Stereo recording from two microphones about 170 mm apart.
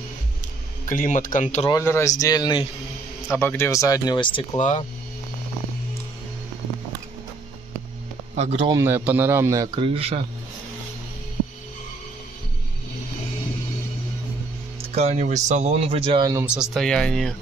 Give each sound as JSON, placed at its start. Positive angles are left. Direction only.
{"t": 0.8, "sound": "speech", "side_deg": 50}
{"t": 1.9, "sound": "speech", "side_deg": 15}
{"t": 4.6, "sound": "speech", "side_deg": 45}
{"t": 8.4, "sound": "speech", "side_deg": -35}
{"t": 8.7, "sound": "a man's voice", "side_deg": -10}
{"t": 9.8, "sound": "speech", "side_deg": -35}
{"t": 15.0, "sound": "speech", "side_deg": -45}
{"t": 16.7, "sound": "speech", "side_deg": 5}